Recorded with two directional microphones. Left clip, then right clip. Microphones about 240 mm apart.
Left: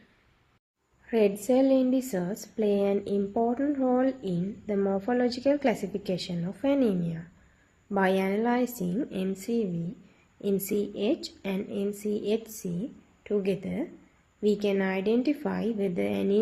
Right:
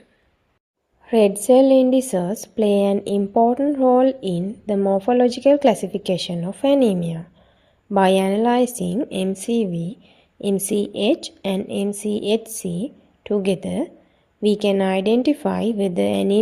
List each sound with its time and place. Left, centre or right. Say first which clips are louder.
1.0 s speech: right 9 dB; right